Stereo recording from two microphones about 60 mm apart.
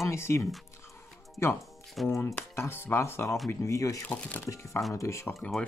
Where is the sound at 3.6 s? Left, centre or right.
Left.